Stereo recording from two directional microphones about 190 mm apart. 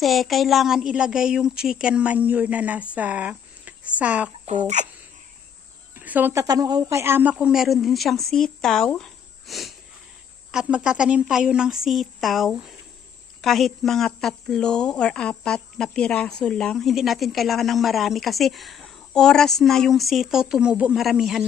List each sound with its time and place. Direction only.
0.0 s a woman's voice: centre (ahead or behind)
4.4 s speech: 35° right (ahead or behind)
5.9 s a woman's voice: 10° right (ahead or behind)